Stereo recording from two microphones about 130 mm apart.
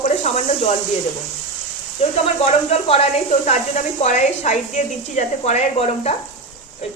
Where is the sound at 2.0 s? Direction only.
55° left (ahead or behind).